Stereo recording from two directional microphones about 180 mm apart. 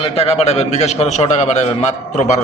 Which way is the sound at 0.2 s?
35° left (ahead or behind).